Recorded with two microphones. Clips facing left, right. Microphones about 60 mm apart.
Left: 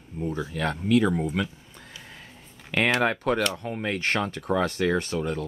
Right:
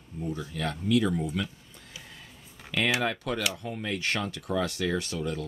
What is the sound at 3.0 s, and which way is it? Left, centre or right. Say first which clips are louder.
Speech: left 6 dB; left.